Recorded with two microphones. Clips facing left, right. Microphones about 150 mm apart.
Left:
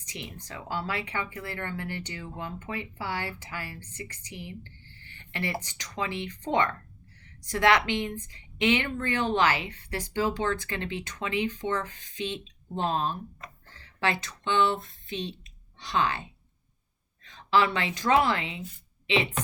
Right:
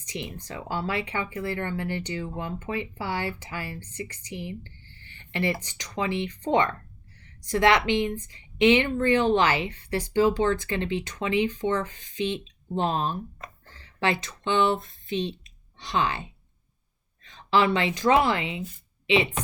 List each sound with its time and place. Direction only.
0.1 s speech: 20° right (ahead or behind)
5.7 s speech: 20° right (ahead or behind)
17.5 s a woman's voice: 20° right (ahead or behind)